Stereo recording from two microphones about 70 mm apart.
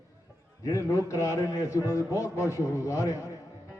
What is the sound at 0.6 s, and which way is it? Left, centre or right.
A man's voice, left.